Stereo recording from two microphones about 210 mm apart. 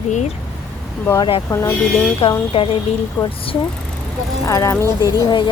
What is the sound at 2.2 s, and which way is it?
Speech, 30° left (ahead or behind).